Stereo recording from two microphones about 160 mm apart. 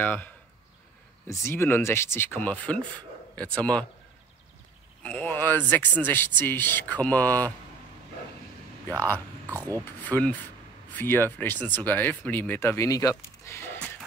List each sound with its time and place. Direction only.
0.0 s speech: 10° left (ahead or behind)
5.0 s speech: 10° left (ahead or behind)
9.5 s speech: 20° right (ahead or behind)
10.0 s speech: 10° left (ahead or behind)